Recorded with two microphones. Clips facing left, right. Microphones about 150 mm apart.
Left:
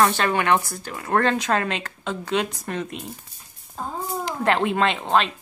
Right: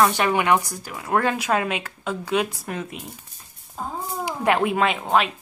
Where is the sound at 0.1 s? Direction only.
15° right (ahead or behind).